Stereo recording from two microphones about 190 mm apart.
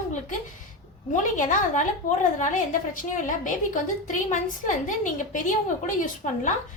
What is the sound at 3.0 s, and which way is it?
A woman's voice, 45° left (ahead or behind).